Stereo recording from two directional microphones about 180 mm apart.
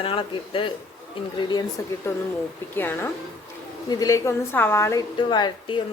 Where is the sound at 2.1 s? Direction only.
15° left (ahead or behind).